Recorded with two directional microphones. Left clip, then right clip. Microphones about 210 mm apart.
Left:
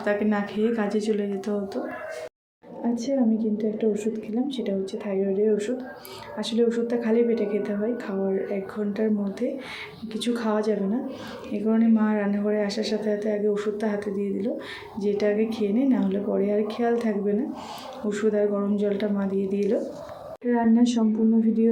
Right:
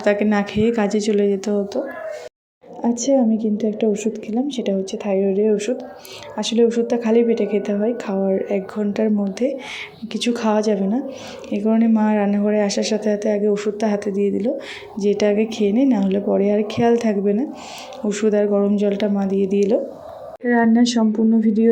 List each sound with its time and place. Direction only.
0.0 s a woman's voice: 35° right (ahead or behind)
2.8 s a woman's voice: 35° right (ahead or behind)